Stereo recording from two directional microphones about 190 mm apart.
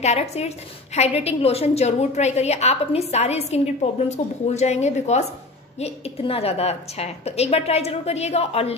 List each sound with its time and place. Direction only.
0.0 s a woman's voice: 35° left (ahead or behind)